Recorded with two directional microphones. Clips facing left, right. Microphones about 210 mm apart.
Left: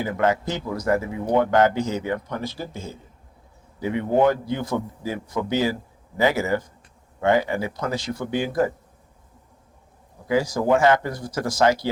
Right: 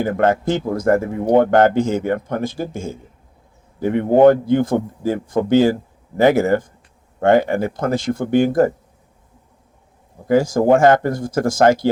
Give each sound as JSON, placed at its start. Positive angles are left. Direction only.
{"t": 0.0, "sound": "speech", "side_deg": -50}
{"t": 10.2, "sound": "speech", "side_deg": -50}